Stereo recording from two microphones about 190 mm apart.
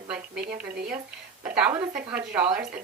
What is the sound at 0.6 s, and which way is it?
Speech, 55° right (ahead or behind).